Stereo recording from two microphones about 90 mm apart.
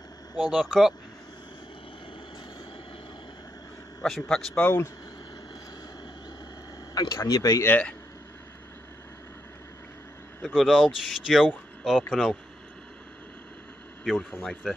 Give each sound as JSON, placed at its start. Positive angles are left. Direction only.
{"t": 0.4, "sound": "speech", "side_deg": 0}
{"t": 4.0, "sound": "speech", "side_deg": 5}
{"t": 4.6, "sound": "speech", "side_deg": 25}
{"t": 6.9, "sound": "a sound", "side_deg": 50}
{"t": 7.2, "sound": "speech", "side_deg": 40}
{"t": 7.6, "sound": "speech", "side_deg": 20}
{"t": 10.4, "sound": "speech", "side_deg": 0}
{"t": 14.3, "sound": "speech", "side_deg": 0}